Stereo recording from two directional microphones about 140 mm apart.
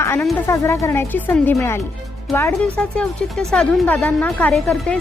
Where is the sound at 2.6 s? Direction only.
5° left (ahead or behind).